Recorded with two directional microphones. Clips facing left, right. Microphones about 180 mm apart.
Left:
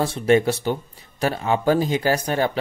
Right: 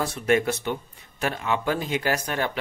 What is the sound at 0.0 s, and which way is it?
Speech, 30° left (ahead or behind).